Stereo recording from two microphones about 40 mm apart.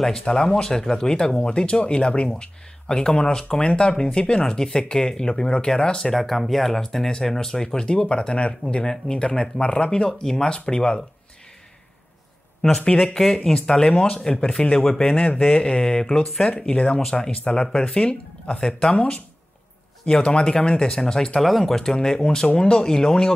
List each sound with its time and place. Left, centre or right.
0.0 s speech: centre
6.1 s speech: centre
12.6 s speech: centre
14.3 s speech: left
16.4 s speech: left
21.4 s speech: centre
21.7 s speech: centre